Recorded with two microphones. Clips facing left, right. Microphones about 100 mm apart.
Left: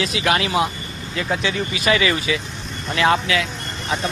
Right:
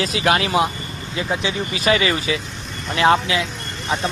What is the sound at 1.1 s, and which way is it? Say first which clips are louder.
Speech: even; 20° right (ahead or behind).